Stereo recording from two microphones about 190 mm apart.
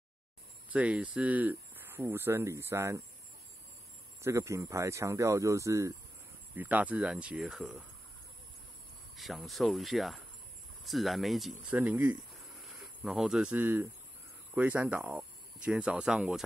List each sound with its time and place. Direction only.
0.7 s speech: 5° right (ahead or behind)
4.2 s speech: 15° right (ahead or behind)
9.1 s speech: centre (ahead or behind)